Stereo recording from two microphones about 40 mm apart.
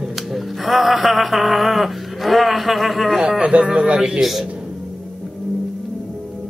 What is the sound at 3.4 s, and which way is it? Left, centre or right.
Speech, right.